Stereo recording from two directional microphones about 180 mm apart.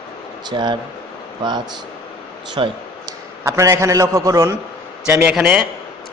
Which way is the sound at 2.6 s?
30° right (ahead or behind).